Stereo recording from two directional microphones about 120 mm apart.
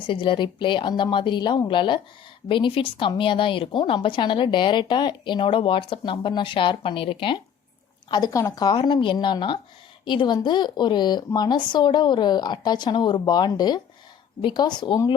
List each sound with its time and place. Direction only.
0.1 s a woman's voice: 45° left (ahead or behind)
8.1 s a woman's voice: 30° left (ahead or behind)